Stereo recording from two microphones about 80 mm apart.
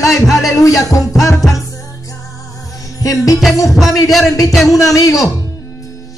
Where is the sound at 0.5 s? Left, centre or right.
Left.